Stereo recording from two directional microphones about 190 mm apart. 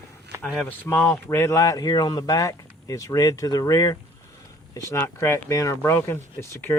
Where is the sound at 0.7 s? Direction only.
10° left (ahead or behind).